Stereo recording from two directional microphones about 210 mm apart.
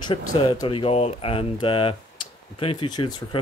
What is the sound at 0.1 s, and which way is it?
Speech, 20° left (ahead or behind).